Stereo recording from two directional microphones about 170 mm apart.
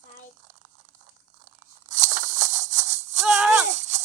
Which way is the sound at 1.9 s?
45° right (ahead or behind).